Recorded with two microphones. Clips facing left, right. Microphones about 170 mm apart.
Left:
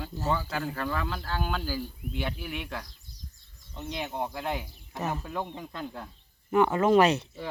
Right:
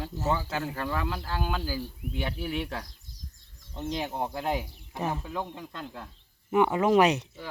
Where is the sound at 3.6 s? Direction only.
90° right.